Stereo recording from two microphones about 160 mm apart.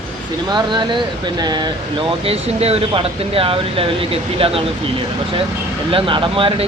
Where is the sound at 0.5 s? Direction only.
30° right (ahead or behind).